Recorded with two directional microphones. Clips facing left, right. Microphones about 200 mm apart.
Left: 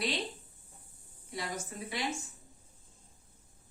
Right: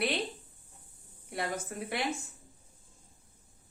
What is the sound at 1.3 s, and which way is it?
Speech, 60° right (ahead or behind).